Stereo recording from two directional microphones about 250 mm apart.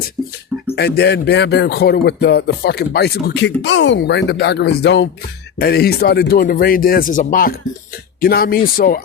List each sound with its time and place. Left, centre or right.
0.8 s music: left